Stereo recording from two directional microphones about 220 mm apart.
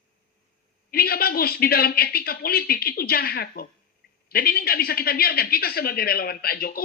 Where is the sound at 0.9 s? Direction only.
45° left (ahead or behind).